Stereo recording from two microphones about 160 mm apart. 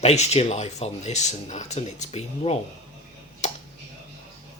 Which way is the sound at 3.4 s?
45° left (ahead or behind).